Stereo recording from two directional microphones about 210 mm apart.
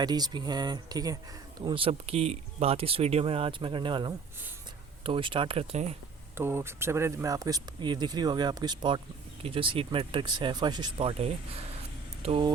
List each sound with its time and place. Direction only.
0.0 s speech: 20° right (ahead or behind)
6.3 s speech: 10° right (ahead or behind)